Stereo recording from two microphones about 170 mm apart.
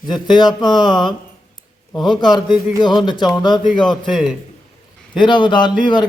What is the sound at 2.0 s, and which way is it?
Speech, 25° left (ahead or behind).